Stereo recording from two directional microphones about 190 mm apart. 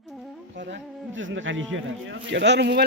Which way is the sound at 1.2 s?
85° right.